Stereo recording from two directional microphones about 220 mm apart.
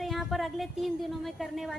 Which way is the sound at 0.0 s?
Centre (ahead or behind).